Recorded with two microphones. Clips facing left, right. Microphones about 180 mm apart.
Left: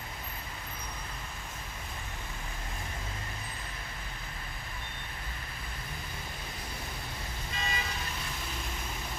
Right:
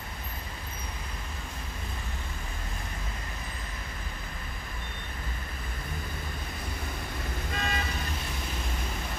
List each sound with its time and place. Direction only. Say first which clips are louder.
7.5 s vehicle: right 4 dB; 55° right (ahead or behind)